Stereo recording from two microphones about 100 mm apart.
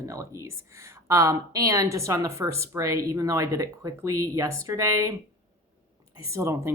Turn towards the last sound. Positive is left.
turn(degrees=-30)  # may be behind; listen again after turning